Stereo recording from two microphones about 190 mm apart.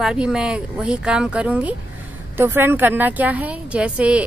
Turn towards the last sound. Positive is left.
turn(degrees=-5)  # may be behind; listen again after turning